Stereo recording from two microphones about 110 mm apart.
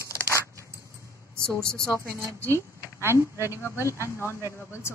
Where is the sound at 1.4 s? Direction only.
5° left (ahead or behind).